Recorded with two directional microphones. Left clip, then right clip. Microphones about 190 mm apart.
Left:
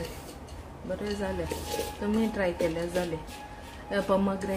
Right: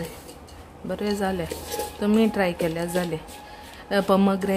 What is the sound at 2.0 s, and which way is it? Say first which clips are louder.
Speech: right 10 dB; 55° right (ahead or behind).